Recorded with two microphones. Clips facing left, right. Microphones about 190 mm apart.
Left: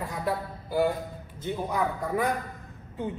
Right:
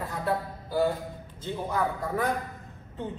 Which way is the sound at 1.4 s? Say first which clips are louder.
Left 1 dB; 15° left (ahead or behind).